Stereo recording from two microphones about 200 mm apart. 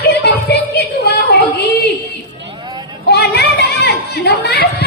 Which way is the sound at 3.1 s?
55° left (ahead or behind).